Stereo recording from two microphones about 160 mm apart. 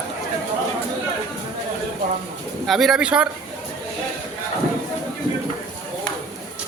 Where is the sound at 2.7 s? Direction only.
Centre (ahead or behind).